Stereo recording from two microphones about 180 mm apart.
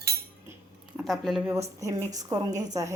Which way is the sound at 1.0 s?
Centre (ahead or behind).